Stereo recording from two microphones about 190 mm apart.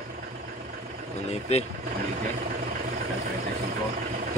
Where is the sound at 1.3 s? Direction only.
35° left (ahead or behind).